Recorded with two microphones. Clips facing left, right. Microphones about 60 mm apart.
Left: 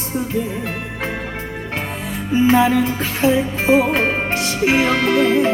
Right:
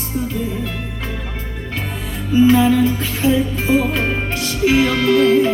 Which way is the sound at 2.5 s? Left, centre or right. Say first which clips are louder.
Left 2 dB; left.